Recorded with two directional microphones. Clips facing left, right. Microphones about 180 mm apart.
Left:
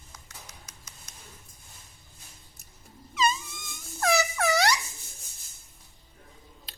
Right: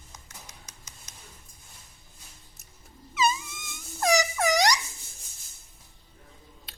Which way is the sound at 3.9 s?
15° right (ahead or behind).